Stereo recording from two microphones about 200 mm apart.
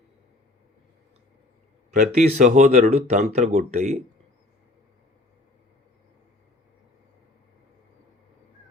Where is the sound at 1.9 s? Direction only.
35° right (ahead or behind).